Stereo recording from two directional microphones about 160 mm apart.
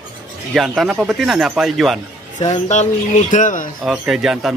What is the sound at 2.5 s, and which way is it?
Speech, 50° left (ahead or behind).